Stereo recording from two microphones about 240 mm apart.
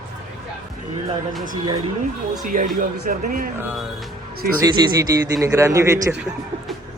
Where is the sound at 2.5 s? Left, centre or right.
Right.